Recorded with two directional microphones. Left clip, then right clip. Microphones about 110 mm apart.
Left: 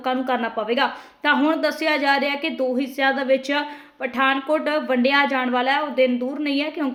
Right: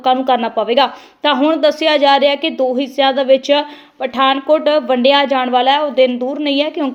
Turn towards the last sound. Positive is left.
turn(degrees=-35)  # may be behind; listen again after turning